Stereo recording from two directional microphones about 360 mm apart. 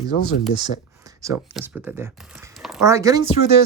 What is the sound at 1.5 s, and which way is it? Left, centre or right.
Speech, centre.